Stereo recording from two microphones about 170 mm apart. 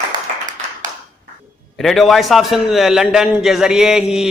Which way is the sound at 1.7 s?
Centre (ahead or behind).